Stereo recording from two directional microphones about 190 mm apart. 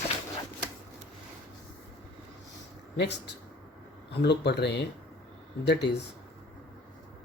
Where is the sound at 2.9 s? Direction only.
65° left (ahead or behind).